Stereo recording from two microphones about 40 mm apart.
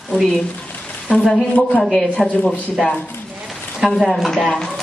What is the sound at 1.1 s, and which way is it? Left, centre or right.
Speech, left.